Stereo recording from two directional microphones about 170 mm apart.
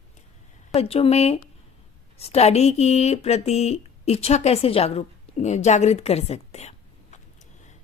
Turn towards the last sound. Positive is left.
turn(degrees=40)  # may be behind; listen again after turning